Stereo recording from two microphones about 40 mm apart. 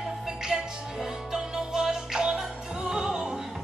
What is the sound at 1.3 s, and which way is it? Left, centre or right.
Music, centre.